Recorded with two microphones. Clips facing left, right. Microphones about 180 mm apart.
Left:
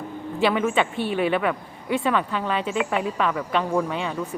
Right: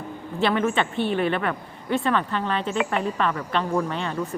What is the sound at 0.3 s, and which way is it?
Speech, 10° left (ahead or behind).